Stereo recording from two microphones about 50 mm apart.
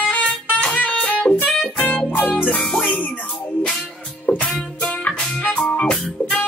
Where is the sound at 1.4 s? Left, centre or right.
Centre.